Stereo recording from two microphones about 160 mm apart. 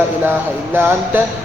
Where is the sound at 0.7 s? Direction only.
15° right (ahead or behind).